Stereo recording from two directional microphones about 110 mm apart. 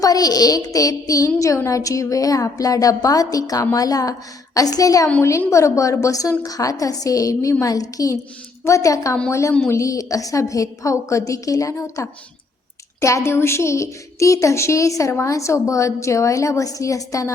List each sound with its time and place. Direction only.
0.0 s a woman's voice: 35° left (ahead or behind)